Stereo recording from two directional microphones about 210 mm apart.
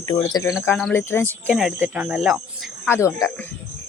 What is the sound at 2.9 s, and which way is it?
Speech, 15° left (ahead or behind).